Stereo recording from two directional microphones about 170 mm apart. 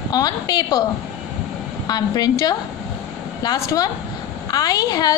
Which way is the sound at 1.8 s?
20° left (ahead or behind).